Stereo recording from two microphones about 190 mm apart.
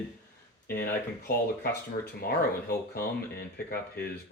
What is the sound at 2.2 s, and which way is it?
Speech, 55° left (ahead or behind).